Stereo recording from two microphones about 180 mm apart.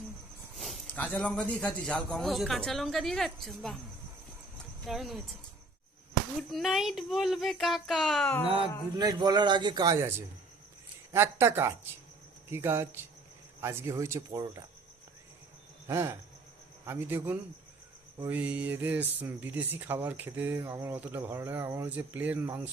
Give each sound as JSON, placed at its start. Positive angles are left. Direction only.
{"t": 0.5, "sound": "a man's voice", "side_deg": 0}
{"t": 4.9, "sound": "a man's voice", "side_deg": 0}
{"t": 6.5, "sound": "a man's voice", "side_deg": 0}
{"t": 8.4, "sound": "a man's voice", "side_deg": -30}
{"t": 15.9, "sound": "speech", "side_deg": -15}